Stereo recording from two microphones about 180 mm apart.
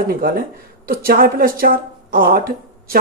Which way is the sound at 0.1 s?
55° right (ahead or behind).